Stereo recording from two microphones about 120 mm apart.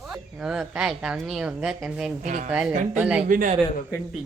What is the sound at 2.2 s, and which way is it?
Speech, 90° right.